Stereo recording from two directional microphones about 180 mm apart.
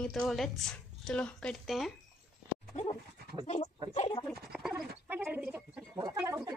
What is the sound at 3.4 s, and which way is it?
Speech, 40° left (ahead or behind).